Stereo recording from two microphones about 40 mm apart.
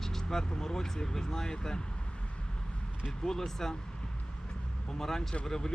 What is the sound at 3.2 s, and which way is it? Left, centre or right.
Speech, centre.